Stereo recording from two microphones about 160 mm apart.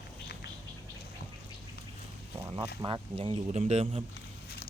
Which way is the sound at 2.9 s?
30° right (ahead or behind).